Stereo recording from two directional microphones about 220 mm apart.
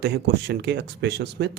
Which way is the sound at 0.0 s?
50° right (ahead or behind).